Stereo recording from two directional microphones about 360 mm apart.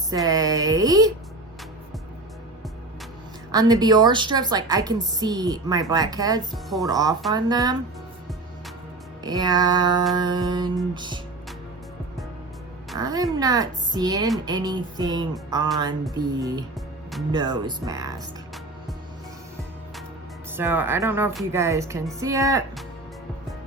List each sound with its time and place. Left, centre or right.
0.1 s a woman's voice: centre
3.5 s a woman's voice: centre
6.5 s speech: centre
6.8 s a woman's voice: centre
9.2 s a woman's voice: centre
13.0 s a woman's voice: centre
20.6 s a woman's voice: centre